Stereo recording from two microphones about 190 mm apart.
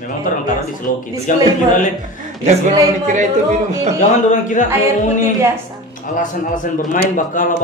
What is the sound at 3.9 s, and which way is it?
A man's voice, 40° left (ahead or behind).